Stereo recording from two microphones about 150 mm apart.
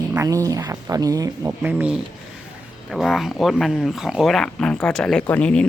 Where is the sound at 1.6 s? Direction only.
10° right (ahead or behind).